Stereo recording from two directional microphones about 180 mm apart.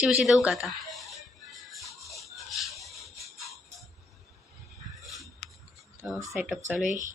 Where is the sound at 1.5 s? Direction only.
Centre (ahead or behind).